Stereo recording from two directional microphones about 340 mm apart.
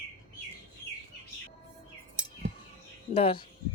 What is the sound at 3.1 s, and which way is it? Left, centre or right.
Speech, centre.